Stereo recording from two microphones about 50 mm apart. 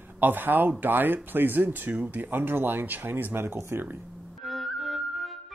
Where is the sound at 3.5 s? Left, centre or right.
Right.